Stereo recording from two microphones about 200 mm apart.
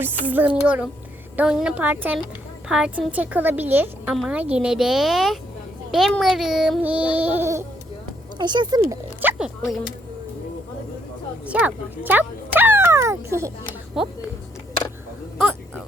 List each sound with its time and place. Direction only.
0.0 s a woman's voice: 10° right (ahead or behind)
11.4 s speech: 5° right (ahead or behind)
14.0 s a woman's voice: centre (ahead or behind)